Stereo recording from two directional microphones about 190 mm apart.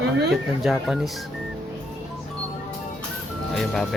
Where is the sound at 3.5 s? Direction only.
Centre (ahead or behind).